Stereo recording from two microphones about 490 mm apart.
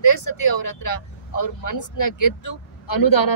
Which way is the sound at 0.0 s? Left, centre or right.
Left.